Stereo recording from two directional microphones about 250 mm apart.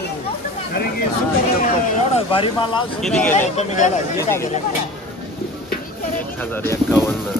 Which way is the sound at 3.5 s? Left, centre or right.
Left.